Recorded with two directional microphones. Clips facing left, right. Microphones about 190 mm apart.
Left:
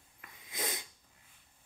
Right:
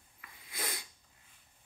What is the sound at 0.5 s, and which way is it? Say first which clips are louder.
Sneeze: left 2 dB; 20° left (ahead or behind).